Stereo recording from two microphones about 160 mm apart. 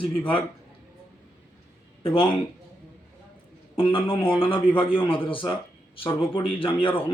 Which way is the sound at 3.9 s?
35° left (ahead or behind).